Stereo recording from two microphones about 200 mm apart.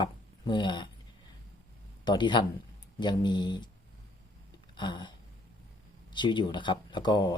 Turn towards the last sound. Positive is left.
turn(degrees=20)  # may be behind; listen again after turning